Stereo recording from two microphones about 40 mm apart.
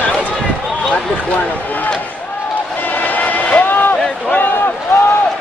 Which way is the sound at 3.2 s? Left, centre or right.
Left.